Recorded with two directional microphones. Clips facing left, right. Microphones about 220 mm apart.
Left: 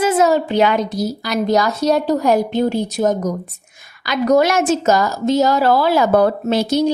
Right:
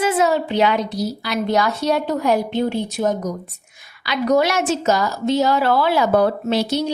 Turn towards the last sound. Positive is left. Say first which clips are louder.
# left 4 dB
turn(degrees=45)  # may be behind; listen again after turning